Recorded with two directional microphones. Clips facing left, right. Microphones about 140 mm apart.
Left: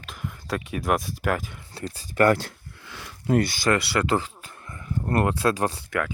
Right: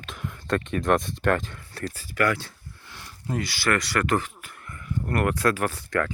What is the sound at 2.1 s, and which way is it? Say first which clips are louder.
Speech: left 5 dB; 40° left (ahead or behind).